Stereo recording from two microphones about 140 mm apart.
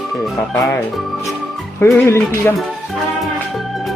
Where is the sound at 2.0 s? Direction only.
20° left (ahead or behind).